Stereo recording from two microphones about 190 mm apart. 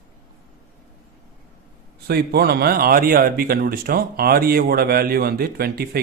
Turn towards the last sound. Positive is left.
turn(degrees=-55)  # may be behind; listen again after turning